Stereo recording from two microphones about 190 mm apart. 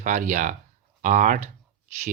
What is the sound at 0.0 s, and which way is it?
Speech, 40° right (ahead or behind).